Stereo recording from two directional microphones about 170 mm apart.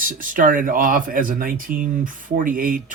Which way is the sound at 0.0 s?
55° right (ahead or behind).